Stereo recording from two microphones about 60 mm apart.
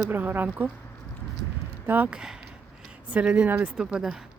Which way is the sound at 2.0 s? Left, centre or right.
Centre.